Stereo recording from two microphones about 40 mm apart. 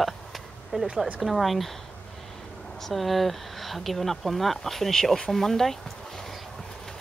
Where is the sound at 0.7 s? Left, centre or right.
Centre.